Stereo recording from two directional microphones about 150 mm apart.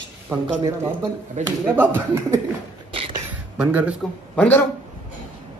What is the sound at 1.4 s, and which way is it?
Speech, 50° right (ahead or behind).